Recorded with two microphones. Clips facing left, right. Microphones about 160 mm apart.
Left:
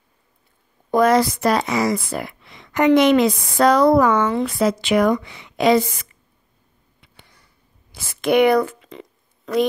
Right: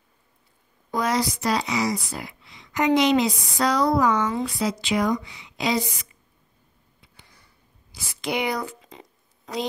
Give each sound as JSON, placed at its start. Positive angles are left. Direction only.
{"t": 0.9, "sound": "speech", "side_deg": 55}
{"t": 7.9, "sound": "speech", "side_deg": 55}